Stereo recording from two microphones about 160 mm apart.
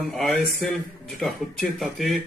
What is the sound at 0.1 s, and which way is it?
Speech, centre (ahead or behind).